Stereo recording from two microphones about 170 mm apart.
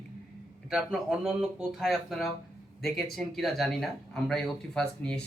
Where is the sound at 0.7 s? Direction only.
5° right (ahead or behind).